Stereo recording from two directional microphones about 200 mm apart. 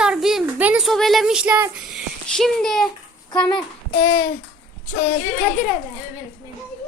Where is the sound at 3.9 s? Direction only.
45° left (ahead or behind).